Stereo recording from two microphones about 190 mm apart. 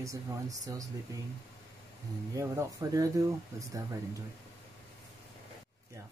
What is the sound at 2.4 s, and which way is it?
Speech, 15° right (ahead or behind).